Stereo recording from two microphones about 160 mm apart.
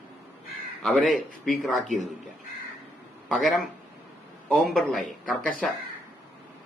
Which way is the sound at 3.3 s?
Centre (ahead or behind).